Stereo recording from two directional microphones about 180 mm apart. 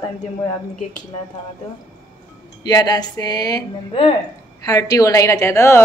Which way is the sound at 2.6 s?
20° left (ahead or behind).